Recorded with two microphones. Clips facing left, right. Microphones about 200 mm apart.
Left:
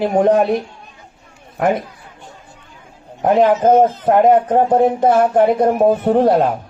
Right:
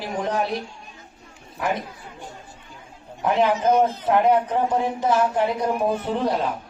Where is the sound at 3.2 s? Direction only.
45° left (ahead or behind).